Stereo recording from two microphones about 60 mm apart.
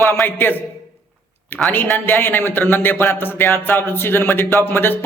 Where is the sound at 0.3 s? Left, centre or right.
Left.